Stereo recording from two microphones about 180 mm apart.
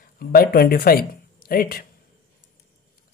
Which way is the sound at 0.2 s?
55° left (ahead or behind).